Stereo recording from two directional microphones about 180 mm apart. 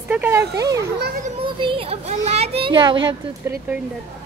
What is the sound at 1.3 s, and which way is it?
A child's voice, 25° right (ahead or behind).